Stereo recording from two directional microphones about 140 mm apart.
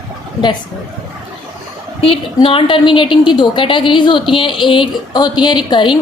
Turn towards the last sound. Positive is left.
turn(degrees=30)  # may be behind; listen again after turning